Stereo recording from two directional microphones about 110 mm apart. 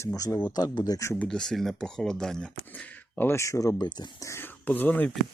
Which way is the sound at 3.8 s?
40° left (ahead or behind).